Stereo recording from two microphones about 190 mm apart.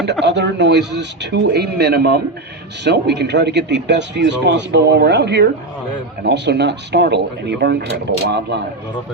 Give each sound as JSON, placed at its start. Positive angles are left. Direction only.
{"t": 0.0, "sound": "speech", "side_deg": -65}